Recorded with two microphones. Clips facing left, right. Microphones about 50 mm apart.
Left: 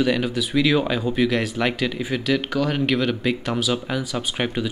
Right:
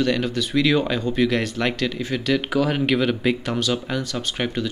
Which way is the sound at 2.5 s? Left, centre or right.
Centre.